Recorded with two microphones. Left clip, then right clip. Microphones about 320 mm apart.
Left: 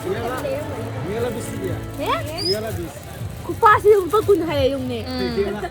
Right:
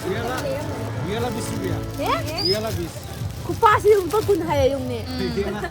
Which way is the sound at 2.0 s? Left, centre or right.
Centre.